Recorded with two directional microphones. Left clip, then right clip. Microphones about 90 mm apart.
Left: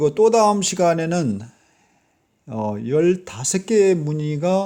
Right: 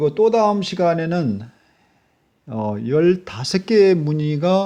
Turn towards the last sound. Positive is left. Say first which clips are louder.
# right 2 dB
turn(degrees=-5)  # may be behind; listen again after turning